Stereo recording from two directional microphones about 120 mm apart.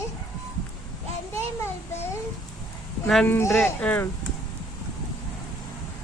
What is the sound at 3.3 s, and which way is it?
Speech, 20° left (ahead or behind).